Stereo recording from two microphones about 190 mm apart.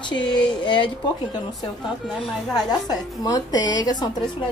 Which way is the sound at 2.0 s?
Centre (ahead or behind).